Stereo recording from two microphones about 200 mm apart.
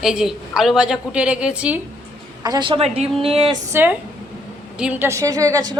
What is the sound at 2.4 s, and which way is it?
A woman's voice, 20° right (ahead or behind).